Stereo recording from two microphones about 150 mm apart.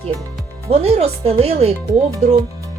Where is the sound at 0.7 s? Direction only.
45° right (ahead or behind).